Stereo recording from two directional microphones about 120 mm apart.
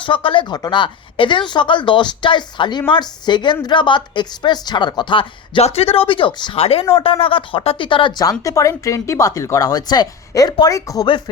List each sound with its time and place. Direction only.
0.0 s a woman's voice: 45° left (ahead or behind)
8.2 s speech: 30° left (ahead or behind)